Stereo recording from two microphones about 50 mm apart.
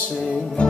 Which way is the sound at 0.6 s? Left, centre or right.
Left.